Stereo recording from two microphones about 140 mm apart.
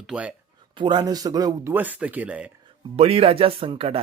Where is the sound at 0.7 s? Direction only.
35° right (ahead or behind).